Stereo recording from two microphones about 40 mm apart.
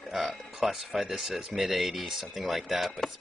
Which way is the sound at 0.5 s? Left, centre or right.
Centre.